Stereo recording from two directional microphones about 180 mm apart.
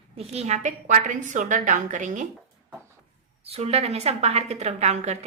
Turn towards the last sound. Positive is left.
turn(degrees=-40)  # may be behind; listen again after turning